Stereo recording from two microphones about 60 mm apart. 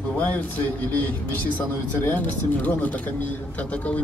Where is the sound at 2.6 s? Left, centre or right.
Left.